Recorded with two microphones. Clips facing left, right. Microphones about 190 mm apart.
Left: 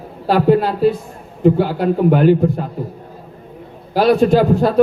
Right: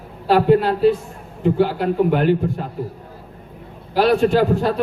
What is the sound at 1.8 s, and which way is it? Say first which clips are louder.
Speech: left 4 dB; 45° left (ahead or behind).